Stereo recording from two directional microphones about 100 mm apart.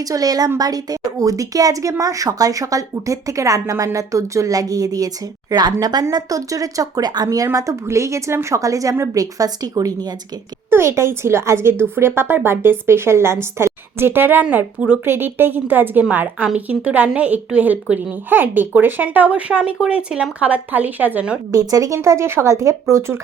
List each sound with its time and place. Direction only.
0.0 s a woman's voice: 35° right (ahead or behind)
10.7 s a woman's voice: 25° right (ahead or behind)
21.5 s a woman's voice: 35° right (ahead or behind)